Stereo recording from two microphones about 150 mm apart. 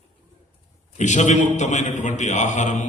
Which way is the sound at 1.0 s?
50° left (ahead or behind).